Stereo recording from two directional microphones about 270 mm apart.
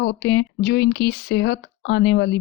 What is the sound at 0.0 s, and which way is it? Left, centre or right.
Speech, left.